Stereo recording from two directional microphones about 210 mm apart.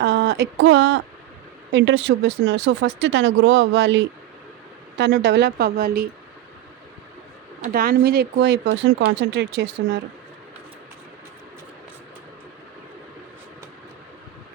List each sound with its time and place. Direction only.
0.0 s a sound: 55° right (ahead or behind)
1.7 s speech: 60° right (ahead or behind)
7.6 s speech: 45° right (ahead or behind)